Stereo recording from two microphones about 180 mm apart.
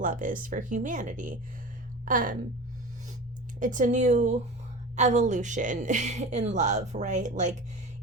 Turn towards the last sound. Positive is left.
turn(degrees=-40)  # may be behind; listen again after turning